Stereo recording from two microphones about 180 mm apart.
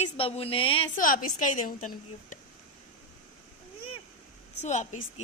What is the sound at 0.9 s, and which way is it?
A woman's voice, 50° left (ahead or behind).